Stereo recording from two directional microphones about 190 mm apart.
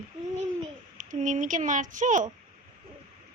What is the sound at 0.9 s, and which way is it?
A child's voice, 40° right (ahead or behind).